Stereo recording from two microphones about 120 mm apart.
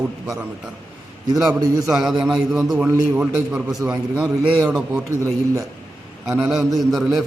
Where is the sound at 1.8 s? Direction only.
5° right (ahead or behind).